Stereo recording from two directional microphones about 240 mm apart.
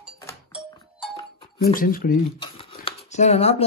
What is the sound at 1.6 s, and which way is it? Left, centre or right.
Speech, left.